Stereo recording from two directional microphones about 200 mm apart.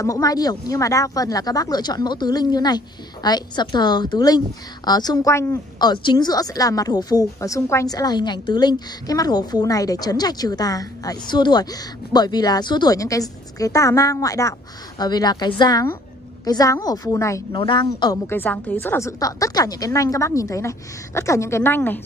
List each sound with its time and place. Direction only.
0.0 s a woman's voice: 15° left (ahead or behind)